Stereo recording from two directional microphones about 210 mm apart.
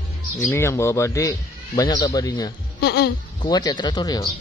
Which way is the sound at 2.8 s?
50° left (ahead or behind).